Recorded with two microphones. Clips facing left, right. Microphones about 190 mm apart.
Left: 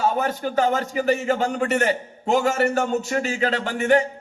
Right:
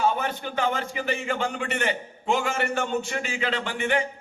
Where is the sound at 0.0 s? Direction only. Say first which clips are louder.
Left 3 dB; 40° left (ahead or behind).